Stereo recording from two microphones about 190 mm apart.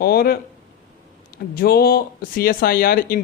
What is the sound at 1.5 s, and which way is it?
Speech, 55° left (ahead or behind).